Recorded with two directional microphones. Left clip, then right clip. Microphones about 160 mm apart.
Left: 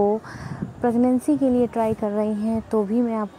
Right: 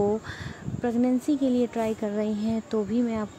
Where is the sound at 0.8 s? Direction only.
10° left (ahead or behind).